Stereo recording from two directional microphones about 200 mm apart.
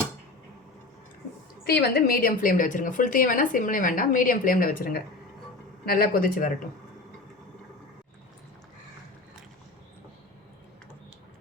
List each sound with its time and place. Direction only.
1.6 s a woman's voice: 50° left (ahead or behind)